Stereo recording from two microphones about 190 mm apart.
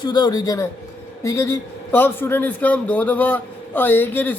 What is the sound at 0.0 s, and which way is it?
A man's voice, 20° left (ahead or behind).